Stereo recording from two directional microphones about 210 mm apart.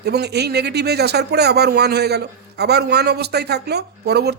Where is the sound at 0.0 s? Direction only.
50° right (ahead or behind).